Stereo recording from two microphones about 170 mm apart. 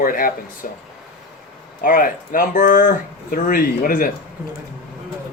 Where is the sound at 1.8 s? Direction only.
50° left (ahead or behind).